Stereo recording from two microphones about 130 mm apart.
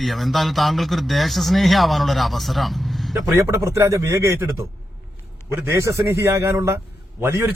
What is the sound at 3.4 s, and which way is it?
A man's voice, 25° right (ahead or behind).